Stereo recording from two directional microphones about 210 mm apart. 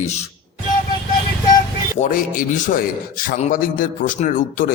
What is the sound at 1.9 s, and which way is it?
A man's voice, 40° left (ahead or behind).